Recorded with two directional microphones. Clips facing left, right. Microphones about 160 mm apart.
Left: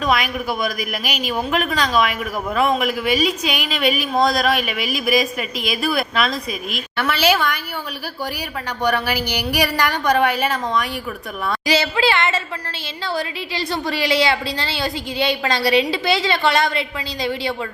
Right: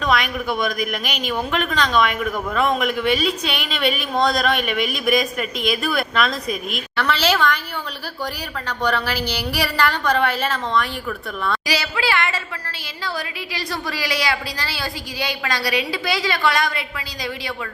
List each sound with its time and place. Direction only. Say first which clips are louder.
0.0 s a woman's voice: left 1 dB; 10° left (ahead or behind)
8.6 s a woman's voice: left 2 dB; 10° left (ahead or behind)